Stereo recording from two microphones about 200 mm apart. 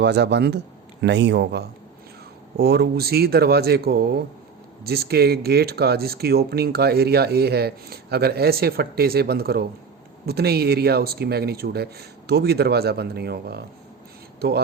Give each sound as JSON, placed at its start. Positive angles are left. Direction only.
{"t": 0.0, "sound": "a man's voice", "side_deg": -55}